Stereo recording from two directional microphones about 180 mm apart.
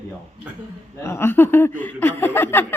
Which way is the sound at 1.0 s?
15° left (ahead or behind).